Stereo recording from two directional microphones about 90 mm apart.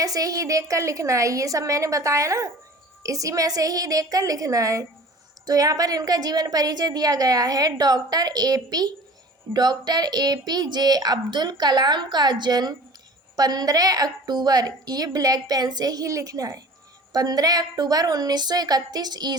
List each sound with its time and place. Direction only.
0.0 s a woman's voice: 40° right (ahead or behind)